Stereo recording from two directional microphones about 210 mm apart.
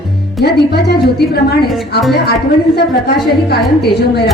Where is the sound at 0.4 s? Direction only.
50° left (ahead or behind).